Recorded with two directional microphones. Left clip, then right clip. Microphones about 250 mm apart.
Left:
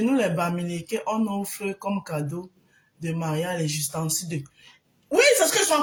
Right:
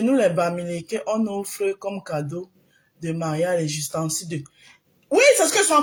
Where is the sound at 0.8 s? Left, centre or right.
Left.